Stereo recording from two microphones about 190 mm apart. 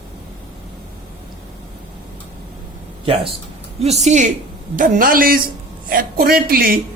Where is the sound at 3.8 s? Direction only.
35° right (ahead or behind).